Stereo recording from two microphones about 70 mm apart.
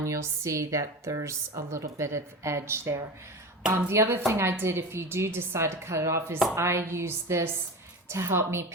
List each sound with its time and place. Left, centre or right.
0.0 s a woman's voice: right